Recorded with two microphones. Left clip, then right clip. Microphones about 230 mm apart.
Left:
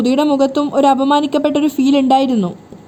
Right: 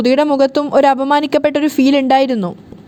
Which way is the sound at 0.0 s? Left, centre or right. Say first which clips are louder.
Right 2 dB; right.